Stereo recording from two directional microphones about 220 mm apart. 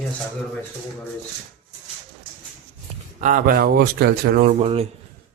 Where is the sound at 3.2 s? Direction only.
40° right (ahead or behind).